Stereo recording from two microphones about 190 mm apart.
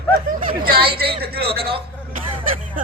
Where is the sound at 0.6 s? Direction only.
55° right (ahead or behind).